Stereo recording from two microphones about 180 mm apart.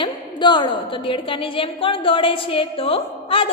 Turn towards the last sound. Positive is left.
turn(degrees=30)  # may be behind; listen again after turning